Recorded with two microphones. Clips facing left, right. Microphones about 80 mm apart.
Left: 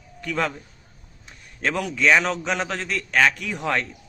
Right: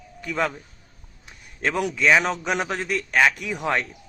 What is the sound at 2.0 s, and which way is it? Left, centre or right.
A man's voice, centre.